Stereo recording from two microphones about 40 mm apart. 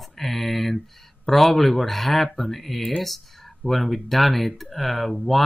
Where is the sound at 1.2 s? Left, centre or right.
Centre.